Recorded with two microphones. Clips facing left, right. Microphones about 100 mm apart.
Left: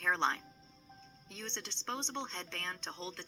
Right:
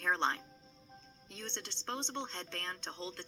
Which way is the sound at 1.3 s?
20° right (ahead or behind).